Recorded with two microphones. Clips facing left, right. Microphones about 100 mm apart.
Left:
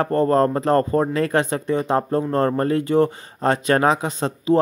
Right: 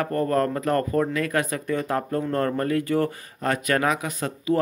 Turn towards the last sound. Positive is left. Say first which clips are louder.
# left 5 dB
turn(degrees=25)  # may be behind; listen again after turning